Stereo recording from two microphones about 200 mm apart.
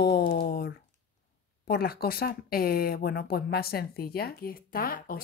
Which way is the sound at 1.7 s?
50° left (ahead or behind).